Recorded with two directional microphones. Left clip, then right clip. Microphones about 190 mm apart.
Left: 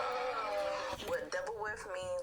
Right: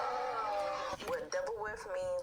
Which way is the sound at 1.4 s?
35° left (ahead or behind).